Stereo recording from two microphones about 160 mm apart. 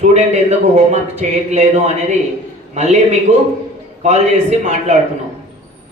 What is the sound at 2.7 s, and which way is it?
Speech, 45° right (ahead or behind).